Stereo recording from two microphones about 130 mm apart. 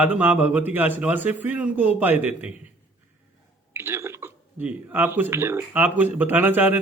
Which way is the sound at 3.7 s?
20° right (ahead or behind).